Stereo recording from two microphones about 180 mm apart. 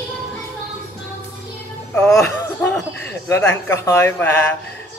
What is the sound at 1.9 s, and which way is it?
Music, 5° left (ahead or behind).